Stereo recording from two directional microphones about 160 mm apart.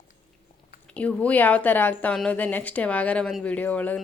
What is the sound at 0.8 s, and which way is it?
A woman's voice, 10° left (ahead or behind).